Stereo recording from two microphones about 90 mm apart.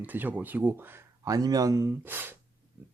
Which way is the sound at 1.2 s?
45° right (ahead or behind).